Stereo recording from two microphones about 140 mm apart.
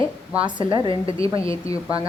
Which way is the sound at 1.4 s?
25° left (ahead or behind).